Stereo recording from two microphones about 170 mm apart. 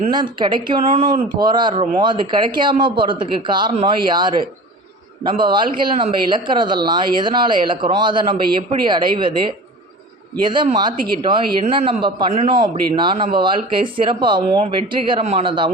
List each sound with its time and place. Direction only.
0.1 s a man's voice: 25° right (ahead or behind)